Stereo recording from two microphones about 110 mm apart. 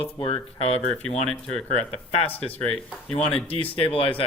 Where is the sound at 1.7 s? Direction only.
70° left (ahead or behind).